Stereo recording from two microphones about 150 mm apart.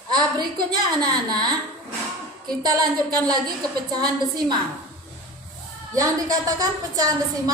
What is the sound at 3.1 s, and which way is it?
A woman's voice, 25° right (ahead or behind).